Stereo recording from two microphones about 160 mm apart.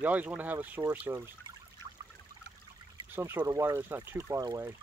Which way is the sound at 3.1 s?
15° right (ahead or behind).